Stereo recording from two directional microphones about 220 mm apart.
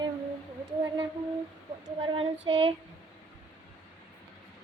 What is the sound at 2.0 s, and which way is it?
Child singing, 25° right (ahead or behind).